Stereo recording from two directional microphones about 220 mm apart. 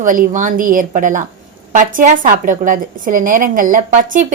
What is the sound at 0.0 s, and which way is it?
A woman's voice, 35° right (ahead or behind).